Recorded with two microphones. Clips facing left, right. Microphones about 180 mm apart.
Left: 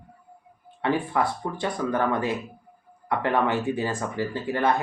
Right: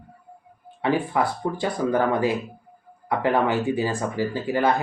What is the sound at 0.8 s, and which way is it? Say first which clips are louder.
Speech: right 2 dB; 5° right (ahead or behind).